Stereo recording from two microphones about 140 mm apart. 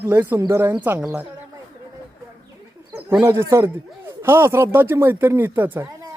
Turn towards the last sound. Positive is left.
turn(degrees=-15)  # may be behind; listen again after turning